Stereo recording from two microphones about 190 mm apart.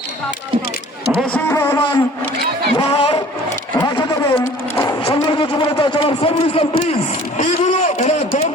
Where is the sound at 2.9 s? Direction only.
30° left (ahead or behind).